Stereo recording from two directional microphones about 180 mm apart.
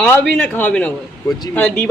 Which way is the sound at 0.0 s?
5° left (ahead or behind).